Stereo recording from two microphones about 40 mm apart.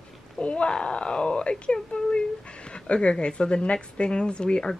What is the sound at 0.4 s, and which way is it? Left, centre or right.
Speech, left.